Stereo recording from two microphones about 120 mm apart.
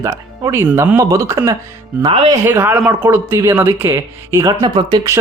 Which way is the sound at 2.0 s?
55° right (ahead or behind).